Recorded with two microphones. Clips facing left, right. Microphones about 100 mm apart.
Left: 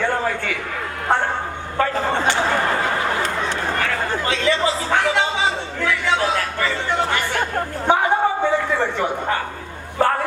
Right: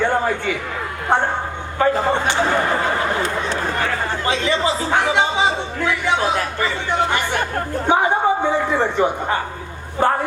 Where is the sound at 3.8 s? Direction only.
20° right (ahead or behind).